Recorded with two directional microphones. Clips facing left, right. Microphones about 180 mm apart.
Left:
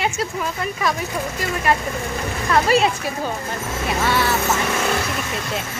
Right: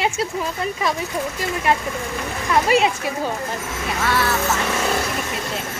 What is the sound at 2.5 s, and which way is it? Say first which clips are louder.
Speech: even; 15° right (ahead or behind).